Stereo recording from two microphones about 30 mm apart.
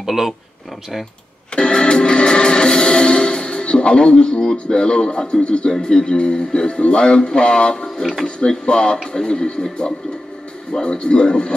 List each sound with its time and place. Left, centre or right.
0.0 s speech: centre
1.5 s music: left
5.7 s speech: left
6.8 s music: left
7.8 s speech: centre
8.4 s speech: left
10.8 s music: left